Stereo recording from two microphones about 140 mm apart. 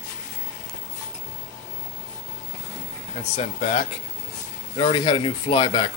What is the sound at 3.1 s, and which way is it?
Speech, 50° left (ahead or behind).